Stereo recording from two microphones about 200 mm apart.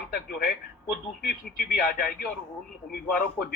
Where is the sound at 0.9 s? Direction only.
50° left (ahead or behind).